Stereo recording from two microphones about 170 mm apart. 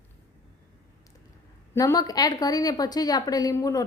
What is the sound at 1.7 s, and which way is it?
A woman's voice, 20° left (ahead or behind).